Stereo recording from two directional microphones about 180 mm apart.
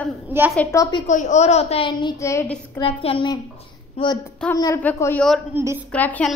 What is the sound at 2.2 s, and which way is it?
Speech, 15° left (ahead or behind).